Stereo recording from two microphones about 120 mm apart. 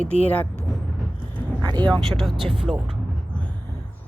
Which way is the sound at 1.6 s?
35° right (ahead or behind).